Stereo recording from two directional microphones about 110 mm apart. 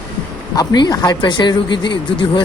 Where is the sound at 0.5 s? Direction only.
40° left (ahead or behind).